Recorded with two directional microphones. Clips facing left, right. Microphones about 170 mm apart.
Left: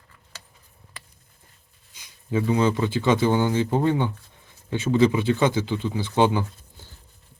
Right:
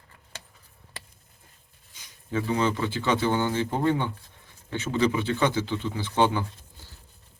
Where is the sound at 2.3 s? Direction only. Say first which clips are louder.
Left 4 dB; 15° left (ahead or behind).